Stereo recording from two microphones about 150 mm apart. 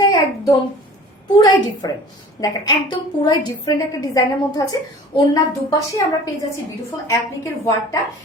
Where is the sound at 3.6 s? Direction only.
25° left (ahead or behind).